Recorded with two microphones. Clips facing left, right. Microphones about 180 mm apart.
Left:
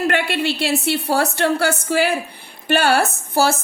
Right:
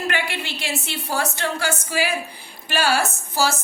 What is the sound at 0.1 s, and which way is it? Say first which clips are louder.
A woman's voice: left 7 dB; 60° left (ahead or behind).